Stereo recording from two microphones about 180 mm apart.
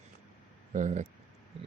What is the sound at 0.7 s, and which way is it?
Speech, 40° right (ahead or behind).